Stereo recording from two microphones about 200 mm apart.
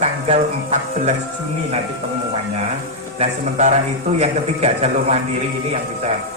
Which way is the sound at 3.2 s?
35° right (ahead or behind).